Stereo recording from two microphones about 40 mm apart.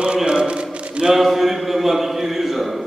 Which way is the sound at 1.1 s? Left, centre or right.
Centre.